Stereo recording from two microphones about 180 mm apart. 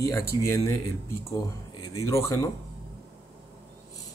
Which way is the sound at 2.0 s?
15° left (ahead or behind).